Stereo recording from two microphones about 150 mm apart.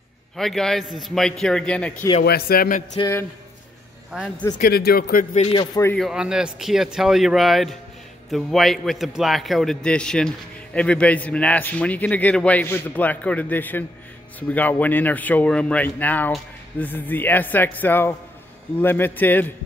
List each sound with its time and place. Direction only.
0.4 s a man's voice: 5° left (ahead or behind)
2.2 s a man's voice: 90° left
3.0 s a man's voice: 20° left (ahead or behind)
4.6 s speech: 85° left
5.3 s speech: 40° left (ahead or behind)
5.9 s a man's voice: 5° right (ahead or behind); by 19.5 s 10° left (ahead or behind)